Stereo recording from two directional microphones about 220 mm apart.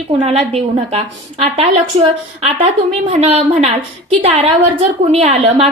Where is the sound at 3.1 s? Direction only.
30° right (ahead or behind).